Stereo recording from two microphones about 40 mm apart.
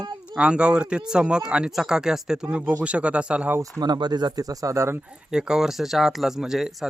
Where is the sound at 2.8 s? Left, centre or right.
Right.